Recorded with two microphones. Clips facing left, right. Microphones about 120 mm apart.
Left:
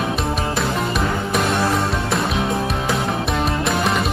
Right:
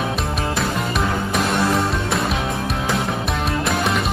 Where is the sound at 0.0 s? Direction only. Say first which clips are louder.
Left 1 dB; centre (ahead or behind).